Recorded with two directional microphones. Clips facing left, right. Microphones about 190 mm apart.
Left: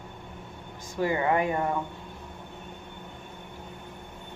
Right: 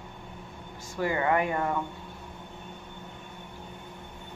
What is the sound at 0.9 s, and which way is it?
Speech, 20° left (ahead or behind).